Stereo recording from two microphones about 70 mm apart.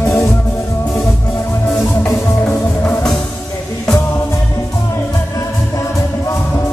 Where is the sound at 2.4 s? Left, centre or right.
Left.